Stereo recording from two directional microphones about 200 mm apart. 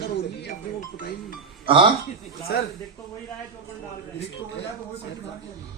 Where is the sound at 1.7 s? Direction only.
25° right (ahead or behind).